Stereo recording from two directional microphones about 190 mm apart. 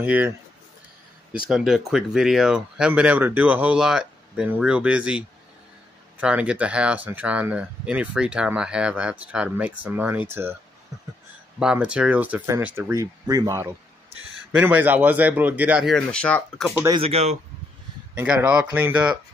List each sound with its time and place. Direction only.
0.0 s speech: 10° right (ahead or behind)
1.3 s speech: 5° right (ahead or behind)
11.6 s speech: 5° right (ahead or behind)
17.0 s speech: 35° right (ahead or behind)
18.1 s speech: 5° right (ahead or behind)